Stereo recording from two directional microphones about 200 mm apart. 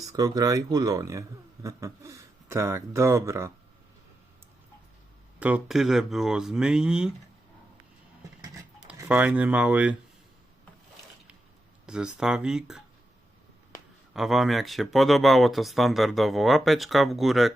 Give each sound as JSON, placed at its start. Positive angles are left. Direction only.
{"t": 0.0, "sound": "speech", "side_deg": -15}
{"t": 5.4, "sound": "speech", "side_deg": -5}
{"t": 8.9, "sound": "speech", "side_deg": -5}
{"t": 11.9, "sound": "speech", "side_deg": -5}
{"t": 14.1, "sound": "speech", "side_deg": 0}